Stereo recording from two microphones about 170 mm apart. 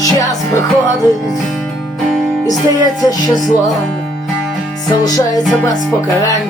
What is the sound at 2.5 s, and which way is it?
Music, 20° left (ahead or behind).